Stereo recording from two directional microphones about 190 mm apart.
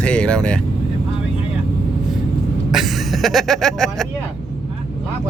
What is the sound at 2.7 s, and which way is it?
Speech, centre (ahead or behind).